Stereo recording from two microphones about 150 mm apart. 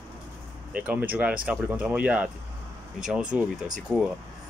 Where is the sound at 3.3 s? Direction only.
10° right (ahead or behind).